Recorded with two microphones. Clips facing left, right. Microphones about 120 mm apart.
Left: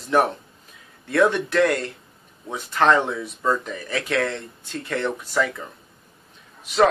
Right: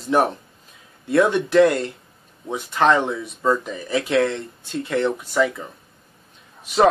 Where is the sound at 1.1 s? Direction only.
25° right (ahead or behind).